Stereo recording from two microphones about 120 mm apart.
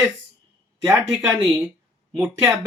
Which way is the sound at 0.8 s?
20° right (ahead or behind).